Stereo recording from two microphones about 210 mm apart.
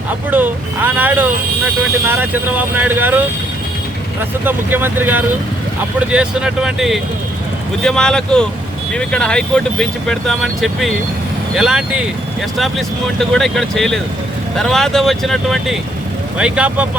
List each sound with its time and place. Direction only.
0.3 s speech: 10° right (ahead or behind)